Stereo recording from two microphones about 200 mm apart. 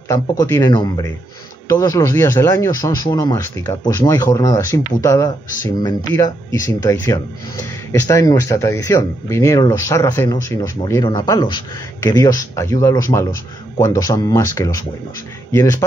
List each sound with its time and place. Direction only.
0.1 s a man's voice: 15° left (ahead or behind)